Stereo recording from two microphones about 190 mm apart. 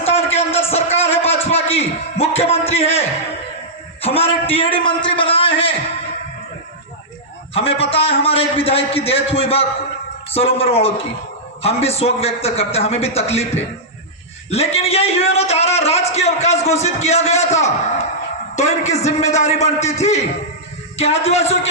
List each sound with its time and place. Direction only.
0.0 s a sound: 35° left (ahead or behind)
7.5 s a man's voice: 30° left (ahead or behind)
14.5 s a man's voice: 35° left (ahead or behind)